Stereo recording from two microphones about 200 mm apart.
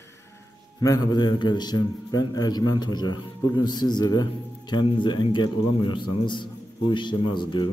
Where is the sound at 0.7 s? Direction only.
20° left (ahead or behind).